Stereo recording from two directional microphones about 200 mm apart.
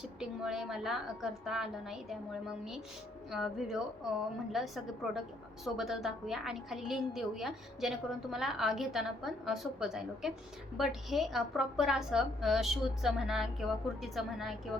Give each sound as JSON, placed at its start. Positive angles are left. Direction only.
{"t": 0.2, "sound": "a woman's voice", "side_deg": 0}